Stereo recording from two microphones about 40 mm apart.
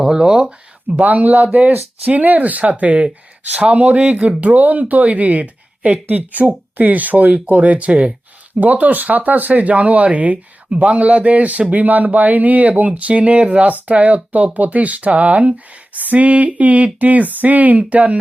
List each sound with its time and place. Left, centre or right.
0.0 s a sound: centre
0.9 s speech: right
4.4 s speech: right